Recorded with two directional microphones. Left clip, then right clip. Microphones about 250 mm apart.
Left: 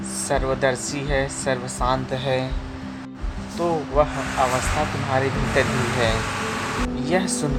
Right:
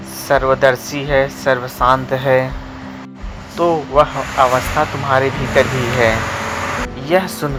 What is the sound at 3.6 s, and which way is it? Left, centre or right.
Speech, centre.